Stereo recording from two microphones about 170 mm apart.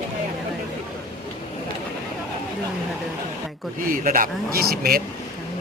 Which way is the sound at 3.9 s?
50° right (ahead or behind).